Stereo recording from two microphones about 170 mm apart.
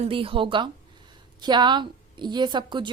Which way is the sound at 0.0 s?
30° right (ahead or behind).